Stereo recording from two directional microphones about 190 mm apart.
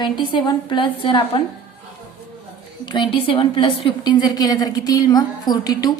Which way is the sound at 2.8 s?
25° left (ahead or behind).